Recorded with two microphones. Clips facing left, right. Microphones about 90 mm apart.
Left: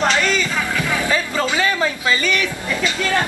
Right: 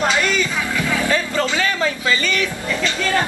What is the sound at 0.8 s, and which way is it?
Music, 15° left (ahead or behind).